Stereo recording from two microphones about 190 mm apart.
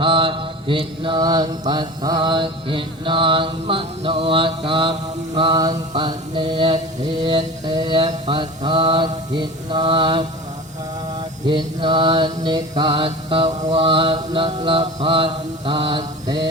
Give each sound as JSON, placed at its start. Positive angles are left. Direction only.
{"t": 0.0, "sound": "mantra", "side_deg": -25}
{"t": 11.4, "sound": "mantra", "side_deg": -25}